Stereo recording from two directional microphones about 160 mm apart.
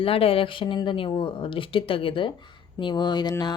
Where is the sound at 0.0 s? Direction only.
35° left (ahead or behind).